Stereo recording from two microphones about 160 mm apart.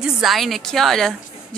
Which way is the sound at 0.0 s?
Centre (ahead or behind).